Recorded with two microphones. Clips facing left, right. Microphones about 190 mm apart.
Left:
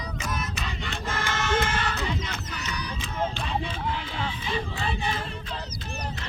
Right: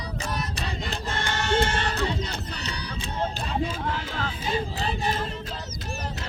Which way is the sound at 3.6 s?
40° right (ahead or behind).